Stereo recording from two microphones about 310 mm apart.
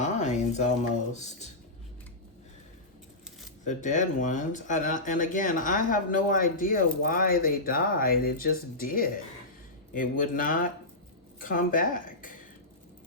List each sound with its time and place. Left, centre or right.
0.0 s a sound: left
1.1 s speech: left
3.6 s speech: left